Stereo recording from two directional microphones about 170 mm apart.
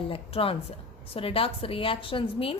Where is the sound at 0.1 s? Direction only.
35° left (ahead or behind).